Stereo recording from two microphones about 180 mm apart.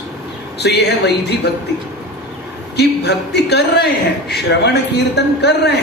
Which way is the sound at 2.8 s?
70° left (ahead or behind).